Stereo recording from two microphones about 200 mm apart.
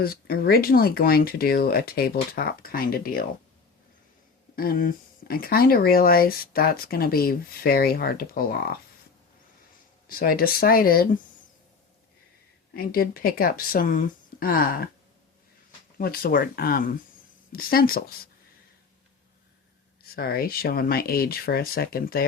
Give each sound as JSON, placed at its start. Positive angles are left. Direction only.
{"t": 0.0, "sound": "speech", "side_deg": 50}
{"t": 4.5, "sound": "speech", "side_deg": 45}
{"t": 10.1, "sound": "speech", "side_deg": 45}
{"t": 12.7, "sound": "speech", "side_deg": 50}
{"t": 16.0, "sound": "speech", "side_deg": 50}
{"t": 20.0, "sound": "speech", "side_deg": 50}